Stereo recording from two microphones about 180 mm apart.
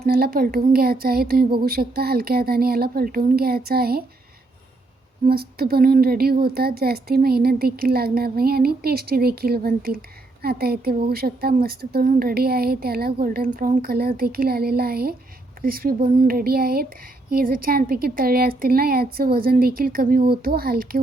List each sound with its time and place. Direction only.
0.0 s speech: 55° right (ahead or behind)
5.2 s speech: 60° right (ahead or behind)